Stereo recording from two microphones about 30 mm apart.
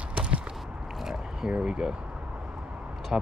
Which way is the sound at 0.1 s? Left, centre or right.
Right.